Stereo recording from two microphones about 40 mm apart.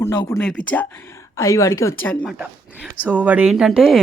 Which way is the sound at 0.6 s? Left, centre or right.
Left.